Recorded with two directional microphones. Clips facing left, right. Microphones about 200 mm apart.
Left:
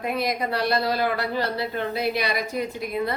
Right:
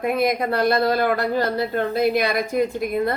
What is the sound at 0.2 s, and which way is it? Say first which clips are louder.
Speech: right 5 dB; 50° right (ahead or behind).